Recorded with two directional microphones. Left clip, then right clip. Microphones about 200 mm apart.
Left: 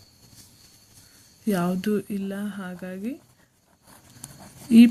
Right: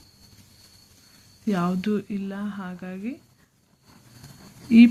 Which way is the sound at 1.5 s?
30° left (ahead or behind).